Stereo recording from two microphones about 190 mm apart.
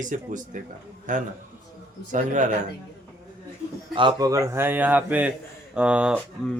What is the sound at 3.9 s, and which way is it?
Speech, 20° right (ahead or behind).